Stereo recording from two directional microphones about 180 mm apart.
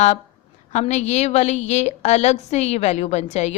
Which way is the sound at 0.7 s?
40° left (ahead or behind).